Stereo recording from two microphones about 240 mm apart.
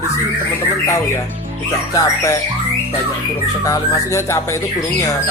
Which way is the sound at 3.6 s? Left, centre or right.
Centre.